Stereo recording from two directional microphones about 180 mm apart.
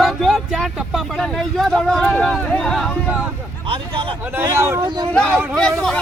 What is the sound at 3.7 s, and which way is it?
Speech, 30° right (ahead or behind).